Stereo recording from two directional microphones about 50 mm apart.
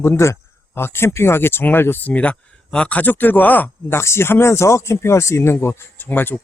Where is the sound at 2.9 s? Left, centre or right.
Left.